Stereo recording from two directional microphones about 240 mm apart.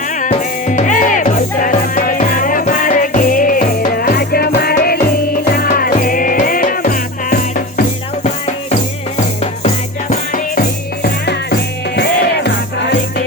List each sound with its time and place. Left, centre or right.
0.1 s music: left
9.4 s music: left